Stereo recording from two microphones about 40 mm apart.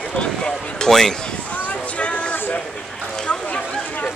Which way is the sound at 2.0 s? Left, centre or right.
Left.